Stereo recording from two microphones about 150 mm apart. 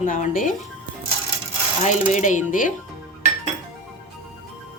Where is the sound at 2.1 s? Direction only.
55° left (ahead or behind).